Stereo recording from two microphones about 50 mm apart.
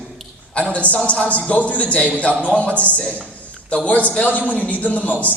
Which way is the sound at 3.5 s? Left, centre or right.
Left.